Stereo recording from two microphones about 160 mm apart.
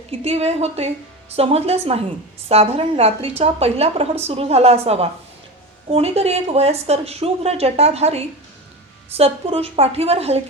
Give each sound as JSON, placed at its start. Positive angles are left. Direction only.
{"t": 0.1, "sound": "a woman's voice", "side_deg": -40}